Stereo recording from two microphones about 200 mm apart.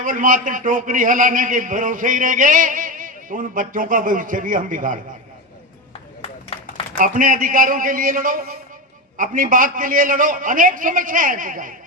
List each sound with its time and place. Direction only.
0.0 s a man's voice: 40° right (ahead or behind)
7.0 s a man's voice: 45° right (ahead or behind)